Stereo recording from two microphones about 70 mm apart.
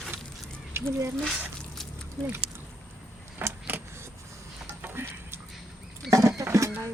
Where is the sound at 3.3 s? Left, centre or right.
Right.